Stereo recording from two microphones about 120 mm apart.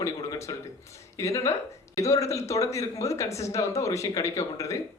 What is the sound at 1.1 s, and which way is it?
Speech, 25° left (ahead or behind).